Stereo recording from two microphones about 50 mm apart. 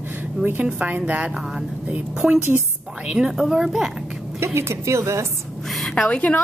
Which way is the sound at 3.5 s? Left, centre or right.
Centre.